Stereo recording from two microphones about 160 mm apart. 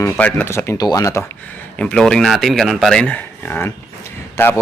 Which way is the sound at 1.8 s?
5° left (ahead or behind).